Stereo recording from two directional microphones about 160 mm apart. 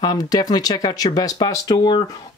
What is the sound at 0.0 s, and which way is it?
Speech, 25° left (ahead or behind).